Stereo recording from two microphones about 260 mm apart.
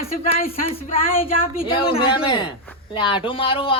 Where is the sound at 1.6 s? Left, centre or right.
Left.